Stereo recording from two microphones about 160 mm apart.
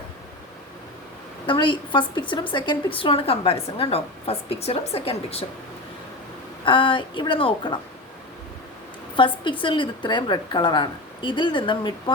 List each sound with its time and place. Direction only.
1.5 s a woman's voice: 30° left (ahead or behind)
6.7 s a woman's voice: 30° left (ahead or behind)
9.1 s a woman's voice: 30° left (ahead or behind)